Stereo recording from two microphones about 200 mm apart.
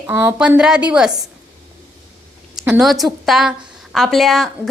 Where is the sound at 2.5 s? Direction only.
5° right (ahead or behind).